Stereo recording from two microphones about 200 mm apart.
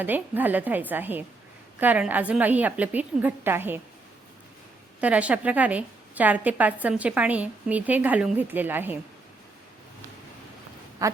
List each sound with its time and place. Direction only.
0.0 s a woman's voice: 10° right (ahead or behind)
4.9 s a woman's voice: 5° right (ahead or behind)
11.0 s a sound: 15° right (ahead or behind)